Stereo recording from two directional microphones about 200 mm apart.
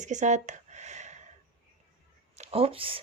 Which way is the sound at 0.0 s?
35° right (ahead or behind).